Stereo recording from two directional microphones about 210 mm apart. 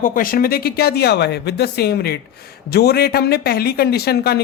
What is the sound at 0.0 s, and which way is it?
A man's voice, 40° left (ahead or behind).